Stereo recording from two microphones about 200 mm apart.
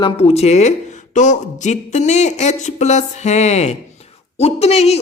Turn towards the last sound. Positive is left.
turn(degrees=30)  # may be behind; listen again after turning